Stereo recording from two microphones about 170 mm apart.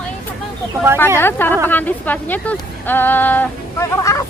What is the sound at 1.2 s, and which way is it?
Speech, 10° left (ahead or behind).